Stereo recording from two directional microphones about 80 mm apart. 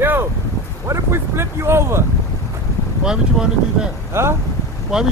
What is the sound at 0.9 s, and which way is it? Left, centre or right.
Speech, right.